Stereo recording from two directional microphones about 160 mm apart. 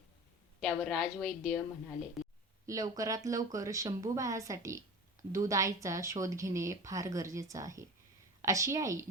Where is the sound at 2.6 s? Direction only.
20° right (ahead or behind).